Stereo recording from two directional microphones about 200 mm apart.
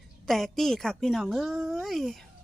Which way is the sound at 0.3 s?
Centre (ahead or behind).